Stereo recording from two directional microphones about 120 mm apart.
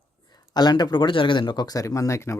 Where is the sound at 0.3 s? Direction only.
35° left (ahead or behind).